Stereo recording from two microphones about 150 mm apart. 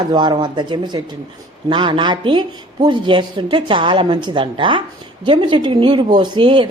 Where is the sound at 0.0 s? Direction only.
30° right (ahead or behind).